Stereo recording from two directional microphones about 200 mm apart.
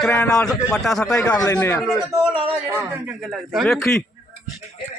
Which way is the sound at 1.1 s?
15° left (ahead or behind).